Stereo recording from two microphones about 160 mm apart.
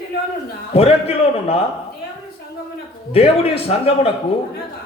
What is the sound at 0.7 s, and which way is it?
Speech, 40° left (ahead or behind).